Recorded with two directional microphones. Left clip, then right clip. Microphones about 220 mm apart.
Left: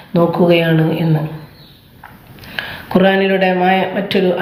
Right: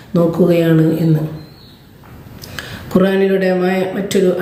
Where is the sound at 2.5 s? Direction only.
15° right (ahead or behind).